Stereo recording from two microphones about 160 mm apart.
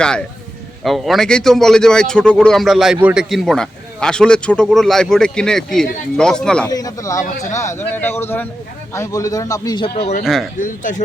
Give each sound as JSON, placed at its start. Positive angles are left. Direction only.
{"t": 0.9, "sound": "speech", "side_deg": 0}
{"t": 6.7, "sound": "a man's voice", "side_deg": 25}
{"t": 10.2, "sound": "speech", "side_deg": 0}
{"t": 10.6, "sound": "speech", "side_deg": 55}